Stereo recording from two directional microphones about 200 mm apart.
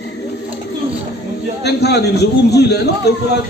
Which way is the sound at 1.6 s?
55° left (ahead or behind).